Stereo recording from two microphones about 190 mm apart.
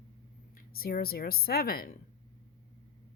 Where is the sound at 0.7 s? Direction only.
50° left (ahead or behind).